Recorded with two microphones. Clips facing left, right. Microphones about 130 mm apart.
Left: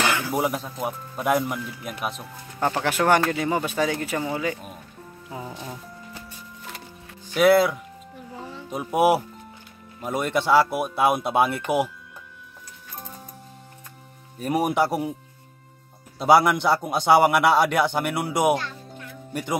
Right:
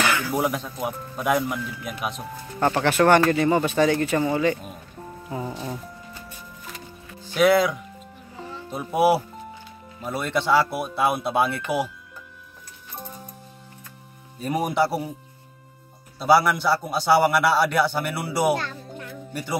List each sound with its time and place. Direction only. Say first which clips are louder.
0.0 s music: even; 25° left (ahead or behind)
0.3 s speech: even; 5° left (ahead or behind)
7.3 s speech: left 1 dB; 5° left (ahead or behind)
14.4 s speech: left 1 dB; 10° left (ahead or behind)
16.2 s a man's voice: left 1 dB; 20° left (ahead or behind)